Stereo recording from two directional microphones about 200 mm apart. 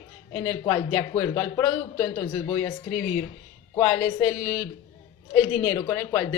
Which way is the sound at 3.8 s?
25° left (ahead or behind).